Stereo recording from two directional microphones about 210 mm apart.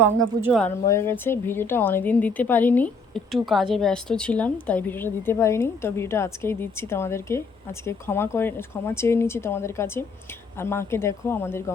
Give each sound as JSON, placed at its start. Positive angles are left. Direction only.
{"t": 0.0, "sound": "speech", "side_deg": -10}
{"t": 0.9, "sound": "a woman's voice", "side_deg": 10}